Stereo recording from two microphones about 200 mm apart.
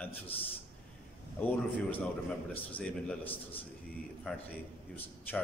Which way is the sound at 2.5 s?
10° left (ahead or behind).